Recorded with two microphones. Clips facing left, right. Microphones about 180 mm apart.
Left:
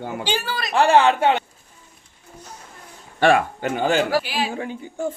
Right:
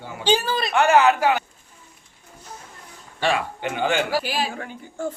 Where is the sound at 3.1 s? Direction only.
55° left (ahead or behind).